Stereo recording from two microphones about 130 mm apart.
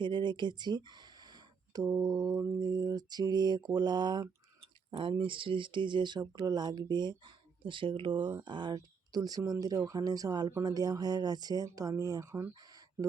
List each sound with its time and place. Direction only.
0.0 s speech: 35° right (ahead or behind); by 12.5 s 20° right (ahead or behind)